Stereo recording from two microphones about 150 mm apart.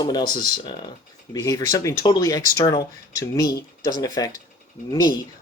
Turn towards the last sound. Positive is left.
turn(degrees=20)  # may be behind; listen again after turning